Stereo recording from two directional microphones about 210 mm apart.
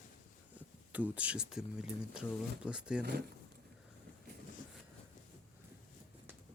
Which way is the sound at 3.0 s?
50° right (ahead or behind).